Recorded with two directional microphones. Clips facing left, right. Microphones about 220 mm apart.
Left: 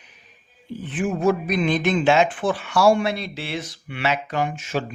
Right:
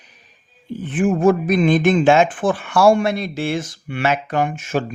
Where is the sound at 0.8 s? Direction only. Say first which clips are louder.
Right 5 dB; 50° right (ahead or behind).